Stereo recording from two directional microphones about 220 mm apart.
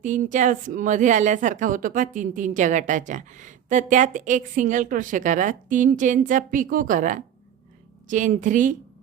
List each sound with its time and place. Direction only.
0.0 s a woman's voice: 35° right (ahead or behind)